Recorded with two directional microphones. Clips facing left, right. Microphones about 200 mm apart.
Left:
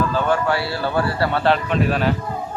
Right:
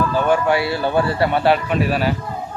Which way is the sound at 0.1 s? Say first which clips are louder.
Right 3 dB; 15° right (ahead or behind).